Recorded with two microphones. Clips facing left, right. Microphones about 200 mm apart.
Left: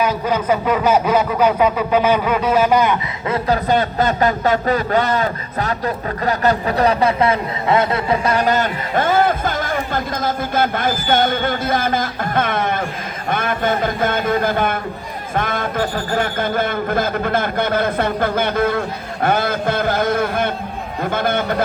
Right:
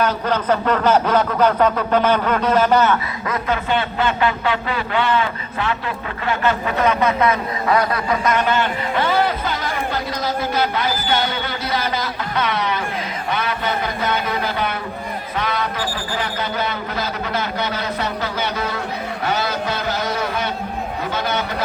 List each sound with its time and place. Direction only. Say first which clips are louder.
0.0 s speech: left 1 dB; 10° left (ahead or behind)
3.2 s a man's voice: left 5 dB; 40° left (ahead or behind)